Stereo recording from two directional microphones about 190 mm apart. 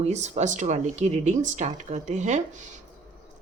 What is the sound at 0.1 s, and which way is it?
Speech, 35° right (ahead or behind).